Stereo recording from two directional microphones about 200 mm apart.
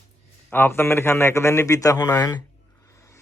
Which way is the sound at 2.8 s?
15° left (ahead or behind).